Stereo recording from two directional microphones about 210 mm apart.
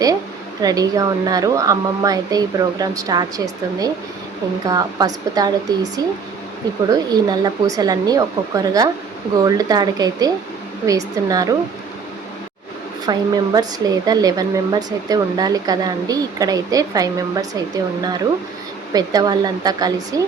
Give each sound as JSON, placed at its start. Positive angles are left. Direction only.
{"t": 0.6, "sound": "speech", "side_deg": -15}
{"t": 6.9, "sound": "speech", "side_deg": -20}
{"t": 13.1, "sound": "speech", "side_deg": -20}
{"t": 18.9, "sound": "speech", "side_deg": -20}